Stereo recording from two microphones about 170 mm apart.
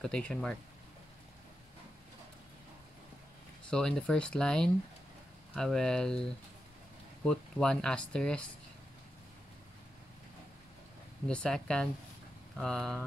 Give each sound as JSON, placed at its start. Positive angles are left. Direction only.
{"t": 0.0, "sound": "speech", "side_deg": 5}
{"t": 3.7, "sound": "speech", "side_deg": 5}
{"t": 11.2, "sound": "speech", "side_deg": 5}